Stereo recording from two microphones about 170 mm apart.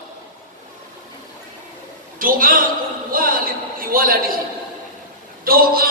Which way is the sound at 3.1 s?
55° right (ahead or behind).